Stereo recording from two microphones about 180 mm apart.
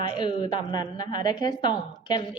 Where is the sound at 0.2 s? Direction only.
25° left (ahead or behind).